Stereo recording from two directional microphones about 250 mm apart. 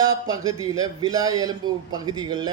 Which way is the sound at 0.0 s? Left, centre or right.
Centre.